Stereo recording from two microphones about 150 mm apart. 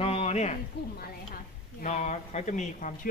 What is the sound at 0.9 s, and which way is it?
A woman's voice, 65° left (ahead or behind).